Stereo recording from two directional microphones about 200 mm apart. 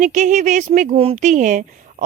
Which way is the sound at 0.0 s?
35° right (ahead or behind).